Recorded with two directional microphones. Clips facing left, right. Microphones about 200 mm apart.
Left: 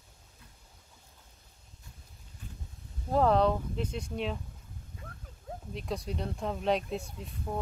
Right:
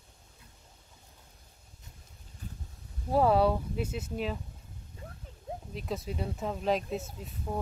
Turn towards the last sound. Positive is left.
turn(degrees=-5)  # may be behind; listen again after turning